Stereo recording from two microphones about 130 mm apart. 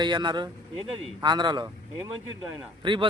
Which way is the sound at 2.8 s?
40° right (ahead or behind).